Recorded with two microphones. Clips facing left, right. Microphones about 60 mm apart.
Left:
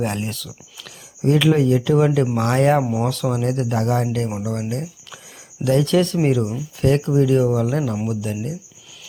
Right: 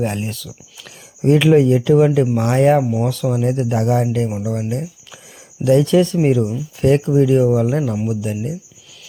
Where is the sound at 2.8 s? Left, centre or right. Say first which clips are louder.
Right 2 dB; centre.